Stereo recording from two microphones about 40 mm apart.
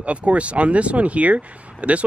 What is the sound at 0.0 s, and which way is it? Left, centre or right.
Speech, right.